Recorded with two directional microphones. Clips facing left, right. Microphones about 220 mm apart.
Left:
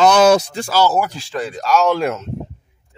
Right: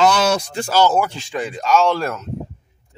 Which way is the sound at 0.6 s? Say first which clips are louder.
Even; 15° right (ahead or behind).